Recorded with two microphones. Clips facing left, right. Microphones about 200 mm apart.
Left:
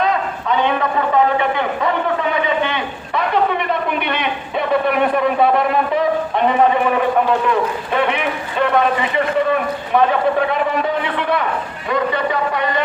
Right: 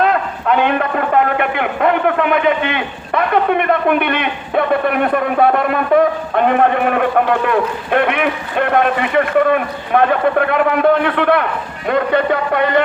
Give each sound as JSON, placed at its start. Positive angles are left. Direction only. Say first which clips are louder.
{"t": 0.4, "sound": "a man's voice", "louder": "right 3 dB", "side_deg": -60}